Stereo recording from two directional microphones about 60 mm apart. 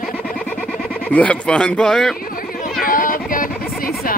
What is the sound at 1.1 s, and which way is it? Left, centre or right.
Speech, left.